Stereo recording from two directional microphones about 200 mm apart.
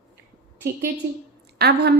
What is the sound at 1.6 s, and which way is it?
Speech, 55° right (ahead or behind).